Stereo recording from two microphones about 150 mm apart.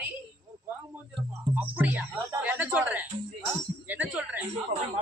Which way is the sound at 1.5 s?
10° right (ahead or behind).